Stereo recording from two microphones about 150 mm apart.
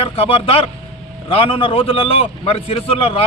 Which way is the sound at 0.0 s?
40° left (ahead or behind).